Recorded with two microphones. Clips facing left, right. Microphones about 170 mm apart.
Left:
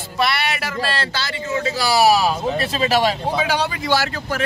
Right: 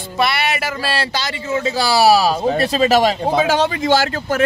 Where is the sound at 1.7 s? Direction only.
30° right (ahead or behind).